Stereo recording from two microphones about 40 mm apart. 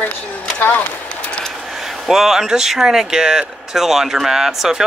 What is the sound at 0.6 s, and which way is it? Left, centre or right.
Speech, left.